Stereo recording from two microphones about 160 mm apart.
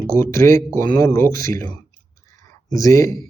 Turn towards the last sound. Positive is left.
turn(degrees=20)  # may be behind; listen again after turning